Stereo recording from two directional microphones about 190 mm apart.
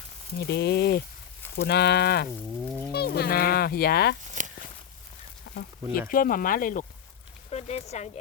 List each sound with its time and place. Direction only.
0.3 s speech: 60° left (ahead or behind)
5.5 s speech: 50° left (ahead or behind)
7.5 s speech: 35° left (ahead or behind)